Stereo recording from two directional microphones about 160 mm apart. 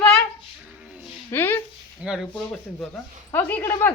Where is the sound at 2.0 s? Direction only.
5° right (ahead or behind).